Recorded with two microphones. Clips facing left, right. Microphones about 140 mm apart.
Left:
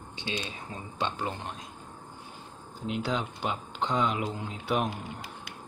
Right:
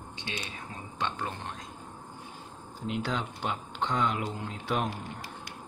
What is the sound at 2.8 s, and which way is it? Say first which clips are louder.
Speech: left 1 dB; 10° left (ahead or behind).